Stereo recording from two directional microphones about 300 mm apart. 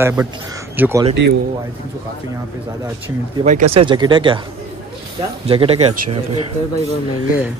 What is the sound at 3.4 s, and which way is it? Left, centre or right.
Speech, right.